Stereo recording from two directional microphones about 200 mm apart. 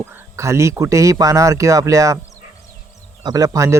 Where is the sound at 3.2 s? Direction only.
15° right (ahead or behind).